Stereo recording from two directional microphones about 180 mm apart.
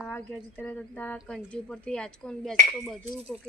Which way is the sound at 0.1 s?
10° left (ahead or behind).